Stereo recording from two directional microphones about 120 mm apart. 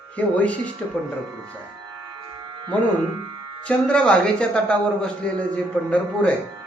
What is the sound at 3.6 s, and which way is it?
A man's voice, 10° left (ahead or behind).